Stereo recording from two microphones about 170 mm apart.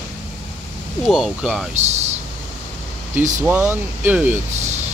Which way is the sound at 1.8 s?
40° right (ahead or behind).